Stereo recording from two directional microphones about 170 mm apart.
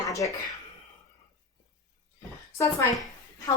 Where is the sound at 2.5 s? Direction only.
20° left (ahead or behind).